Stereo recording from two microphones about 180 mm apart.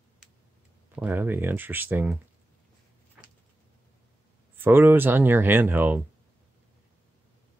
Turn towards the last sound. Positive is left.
turn(degrees=-10)  # may be behind; listen again after turning